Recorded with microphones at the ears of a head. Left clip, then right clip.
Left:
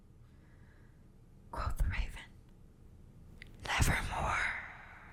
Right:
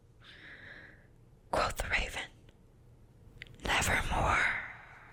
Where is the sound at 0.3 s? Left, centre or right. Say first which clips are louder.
Right 19 dB; right.